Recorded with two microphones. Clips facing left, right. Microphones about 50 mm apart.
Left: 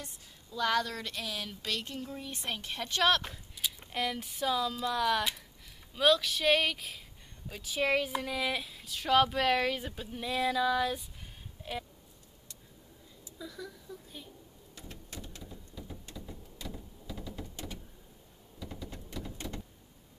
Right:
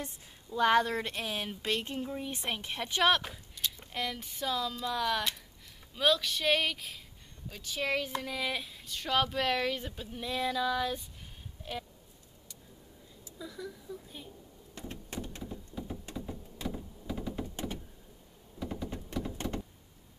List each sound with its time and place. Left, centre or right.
0.0 s speech: right; by 3.3 s centre
3.5 s speech: centre
11.6 s a sound: centre
13.4 s speech: centre
14.8 s a sound: right
15.5 s a sound: centre
16.5 s door: right
18.6 s typing: right
19.4 s door: right